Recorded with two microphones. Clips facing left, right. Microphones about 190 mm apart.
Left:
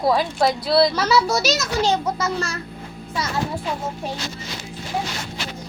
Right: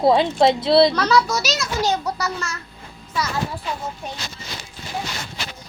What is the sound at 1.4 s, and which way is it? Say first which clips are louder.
Speech: left 3 dB; 50° left (ahead or behind).